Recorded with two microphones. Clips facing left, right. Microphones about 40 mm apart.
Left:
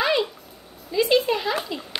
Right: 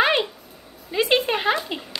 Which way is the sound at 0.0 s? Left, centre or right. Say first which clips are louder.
Right 2 dB; right.